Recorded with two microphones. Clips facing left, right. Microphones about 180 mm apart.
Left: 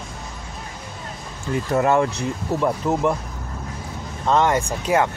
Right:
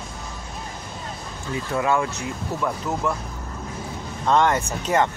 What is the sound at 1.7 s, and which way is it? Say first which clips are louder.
Speech: left 4 dB; 45° left (ahead or behind).